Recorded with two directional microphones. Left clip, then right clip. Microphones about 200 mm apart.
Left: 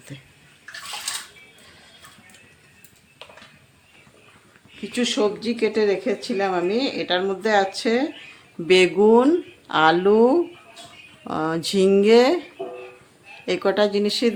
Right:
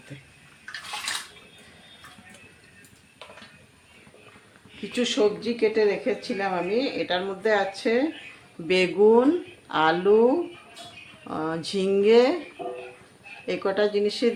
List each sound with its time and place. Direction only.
0.1 s speech: 50° left (ahead or behind)
4.9 s speech: 25° left (ahead or behind)
12.6 s music: 15° right (ahead or behind)
13.4 s speech: 45° left (ahead or behind)